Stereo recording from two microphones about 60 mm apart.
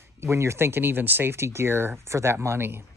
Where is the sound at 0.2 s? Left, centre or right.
Right.